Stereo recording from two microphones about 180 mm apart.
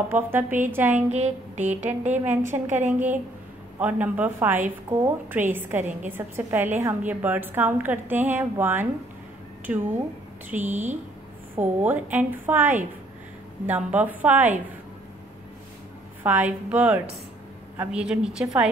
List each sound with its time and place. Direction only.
0.1 s a woman's voice: 10° right (ahead or behind)
1.1 s a sound: 40° right (ahead or behind)
1.9 s a woman's voice: 10° right (ahead or behind)
2.5 s a sound: 40° right (ahead or behind)
2.9 s a woman's voice: 10° right (ahead or behind)
16.2 s a woman's voice: 10° right (ahead or behind)